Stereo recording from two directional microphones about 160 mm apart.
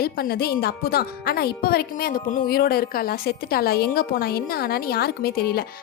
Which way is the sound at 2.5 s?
70° left (ahead or behind).